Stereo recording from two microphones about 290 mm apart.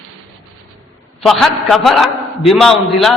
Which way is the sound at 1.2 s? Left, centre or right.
Centre.